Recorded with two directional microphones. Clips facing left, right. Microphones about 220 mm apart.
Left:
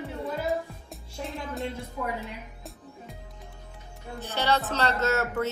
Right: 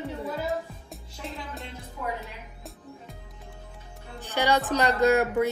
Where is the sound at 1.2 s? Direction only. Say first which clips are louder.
Left 5 dB; centre (ahead or behind).